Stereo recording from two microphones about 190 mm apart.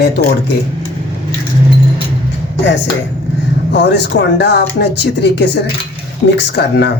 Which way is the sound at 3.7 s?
65° left (ahead or behind).